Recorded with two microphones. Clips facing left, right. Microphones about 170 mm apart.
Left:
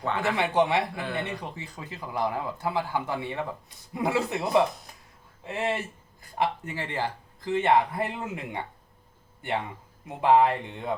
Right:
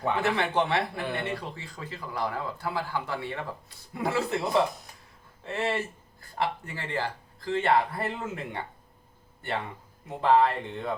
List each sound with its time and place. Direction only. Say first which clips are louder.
0.2 s speech: left 5 dB; 15° left (ahead or behind)
5.5 s speech: even; 15° left (ahead or behind)
10.2 s speech: left 2 dB; 15° left (ahead or behind)